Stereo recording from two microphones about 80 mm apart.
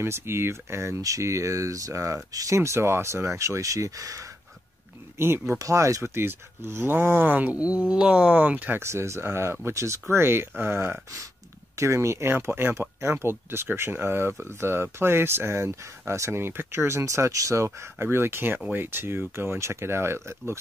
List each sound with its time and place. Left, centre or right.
0.0 s speech: right
5.1 s speech: right
5.6 s speech: right
8.8 s speech: right